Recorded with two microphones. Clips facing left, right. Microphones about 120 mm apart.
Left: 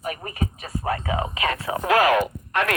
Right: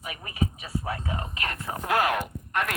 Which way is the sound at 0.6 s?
55° left (ahead or behind).